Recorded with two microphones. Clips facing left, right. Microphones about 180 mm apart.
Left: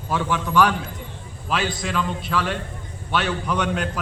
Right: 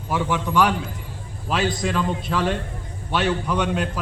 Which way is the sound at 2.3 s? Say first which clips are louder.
Right 2 dB; 30° right (ahead or behind).